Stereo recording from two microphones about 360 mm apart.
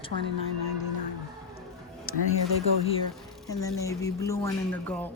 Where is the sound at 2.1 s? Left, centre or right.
Left.